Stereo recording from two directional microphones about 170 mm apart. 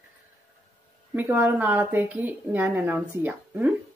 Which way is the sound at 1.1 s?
10° right (ahead or behind).